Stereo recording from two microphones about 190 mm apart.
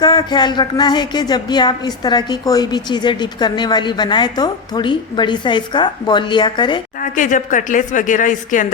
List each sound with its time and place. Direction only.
0.0 s a woman's voice: 20° left (ahead or behind)
7.0 s speech: 40° left (ahead or behind)